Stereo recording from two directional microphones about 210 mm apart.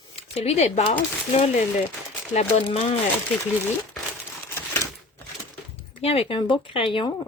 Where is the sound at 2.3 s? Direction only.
30° left (ahead or behind).